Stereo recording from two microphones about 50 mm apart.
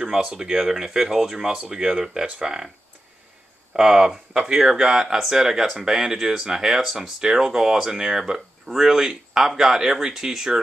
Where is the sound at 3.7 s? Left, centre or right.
Centre.